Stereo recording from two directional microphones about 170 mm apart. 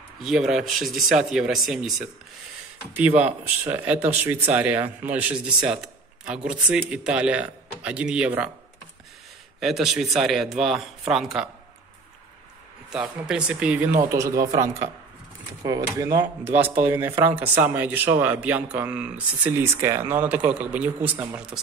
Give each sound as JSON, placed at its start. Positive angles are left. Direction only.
{"t": 0.2, "sound": "speech", "side_deg": 0}
{"t": 3.2, "sound": "speech", "side_deg": -10}
{"t": 9.6, "sound": "speech", "side_deg": 0}
{"t": 12.9, "sound": "speech", "side_deg": -5}
{"t": 14.0, "sound": "speech", "side_deg": -20}
{"t": 15.6, "sound": "speech", "side_deg": -20}